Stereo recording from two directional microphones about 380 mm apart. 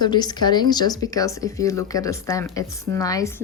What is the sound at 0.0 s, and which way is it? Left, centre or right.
A woman's voice, centre.